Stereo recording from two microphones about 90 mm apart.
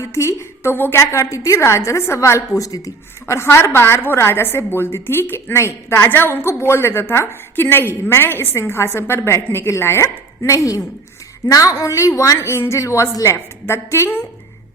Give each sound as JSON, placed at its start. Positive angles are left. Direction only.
{"t": 0.0, "sound": "a woman's voice", "side_deg": 30}